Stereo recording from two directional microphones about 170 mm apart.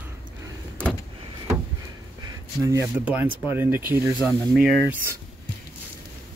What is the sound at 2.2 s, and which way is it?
Speech, 20° right (ahead or behind).